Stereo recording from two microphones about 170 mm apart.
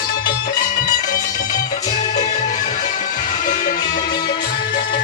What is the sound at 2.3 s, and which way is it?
Music, 50° left (ahead or behind).